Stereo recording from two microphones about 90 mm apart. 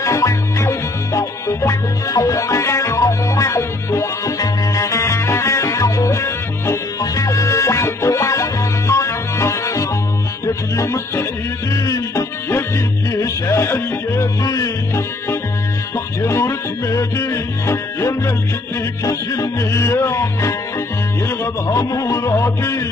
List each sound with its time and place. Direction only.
0.0 s music: 35° left (ahead or behind)
16.2 s music: 30° left (ahead or behind)
21.6 s music: 35° left (ahead or behind)